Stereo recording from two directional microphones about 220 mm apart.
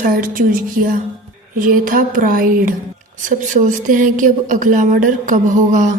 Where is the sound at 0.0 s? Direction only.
40° right (ahead or behind).